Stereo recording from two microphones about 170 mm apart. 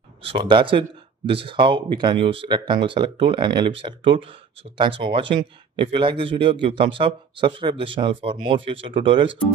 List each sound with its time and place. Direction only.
0.2 s a man's voice: 30° right (ahead or behind)